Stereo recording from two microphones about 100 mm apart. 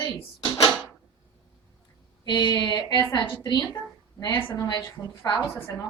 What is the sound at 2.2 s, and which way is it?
A woman's voice, 45° left (ahead or behind).